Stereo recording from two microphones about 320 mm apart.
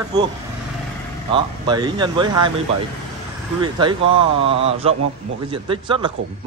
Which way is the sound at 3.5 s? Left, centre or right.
Centre.